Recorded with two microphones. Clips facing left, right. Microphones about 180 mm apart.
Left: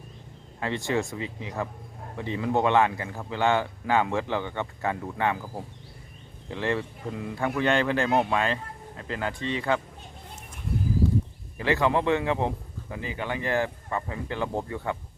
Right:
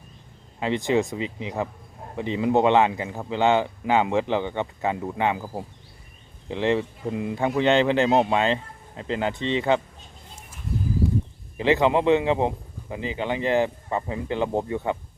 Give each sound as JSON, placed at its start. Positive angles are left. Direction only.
{"t": 0.6, "sound": "speech", "side_deg": -20}
{"t": 11.5, "sound": "speech", "side_deg": -20}